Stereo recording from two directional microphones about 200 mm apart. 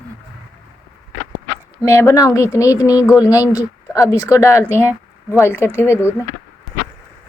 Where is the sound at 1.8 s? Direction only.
15° left (ahead or behind).